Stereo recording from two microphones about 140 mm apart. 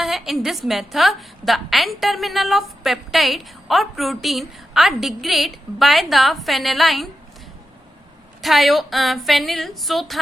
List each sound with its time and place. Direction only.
0.0 s a woman's voice: centre (ahead or behind)
8.4 s a woman's voice: centre (ahead or behind)